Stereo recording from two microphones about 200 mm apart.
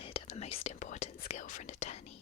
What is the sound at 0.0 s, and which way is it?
Whispering, 30° left (ahead or behind).